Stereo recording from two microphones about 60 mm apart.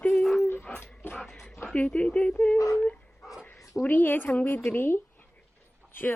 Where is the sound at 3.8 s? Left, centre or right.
Left.